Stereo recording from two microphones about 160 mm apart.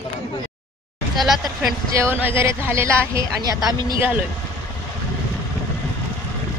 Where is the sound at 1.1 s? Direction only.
Centre (ahead or behind).